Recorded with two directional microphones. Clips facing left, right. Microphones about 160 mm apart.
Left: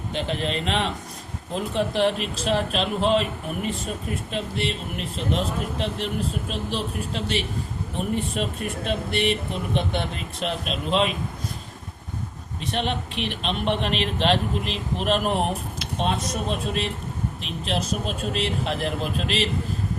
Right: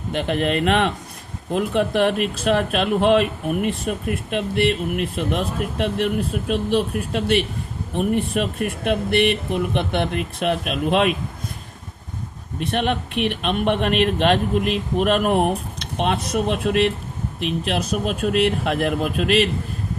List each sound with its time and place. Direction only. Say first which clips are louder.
0.1 s speech: right 6 dB; 60° right (ahead or behind)
12.5 s speech: right 5 dB; 55° right (ahead or behind)
16.5 s speech: right 10 dB; 65° right (ahead or behind)